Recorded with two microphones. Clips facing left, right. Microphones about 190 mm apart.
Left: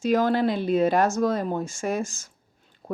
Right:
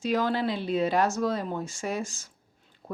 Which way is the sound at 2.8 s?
50° left (ahead or behind).